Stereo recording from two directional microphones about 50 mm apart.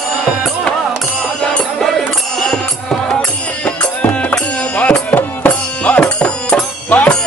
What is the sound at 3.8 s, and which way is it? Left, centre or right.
Music, left.